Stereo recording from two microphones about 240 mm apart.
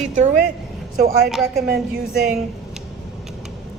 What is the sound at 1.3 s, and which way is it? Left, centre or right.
Speech, centre.